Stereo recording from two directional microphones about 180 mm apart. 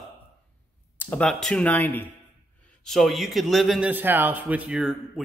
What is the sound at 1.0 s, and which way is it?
Speech, 5° left (ahead or behind).